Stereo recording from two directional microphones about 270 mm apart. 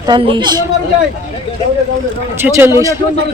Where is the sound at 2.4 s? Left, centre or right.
Centre.